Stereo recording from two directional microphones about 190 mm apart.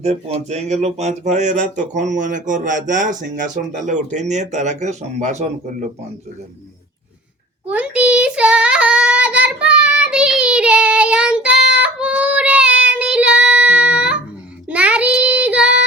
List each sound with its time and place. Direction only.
0.0 s speech: 35° right (ahead or behind)
7.7 s child singing: 5° right (ahead or behind)